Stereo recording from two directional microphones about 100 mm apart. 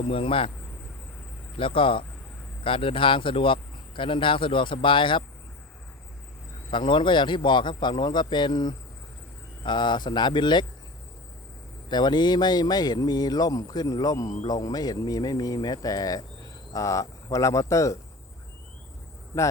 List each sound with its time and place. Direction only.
0.0 s speech: 65° left (ahead or behind)
1.5 s speech: 60° left (ahead or behind)
6.7 s speech: 55° left (ahead or behind)
11.9 s speech: 45° left (ahead or behind)
19.3 s speech: 30° left (ahead or behind)